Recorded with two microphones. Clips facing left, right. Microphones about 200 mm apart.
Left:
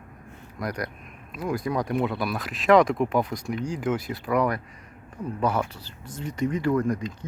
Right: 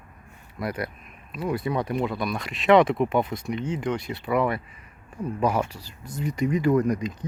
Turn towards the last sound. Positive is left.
turn(degrees=-15)  # may be behind; listen again after turning